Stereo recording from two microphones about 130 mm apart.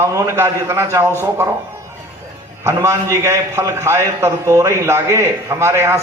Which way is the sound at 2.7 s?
20° right (ahead or behind).